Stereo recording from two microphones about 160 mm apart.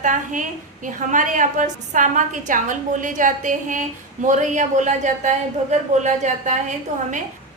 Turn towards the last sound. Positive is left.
turn(degrees=-50)  # may be behind; listen again after turning